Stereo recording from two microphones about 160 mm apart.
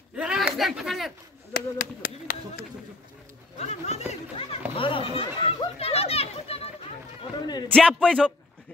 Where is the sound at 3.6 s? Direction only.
40° left (ahead or behind).